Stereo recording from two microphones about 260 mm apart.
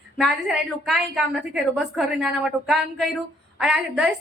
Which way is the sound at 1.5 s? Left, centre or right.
Centre.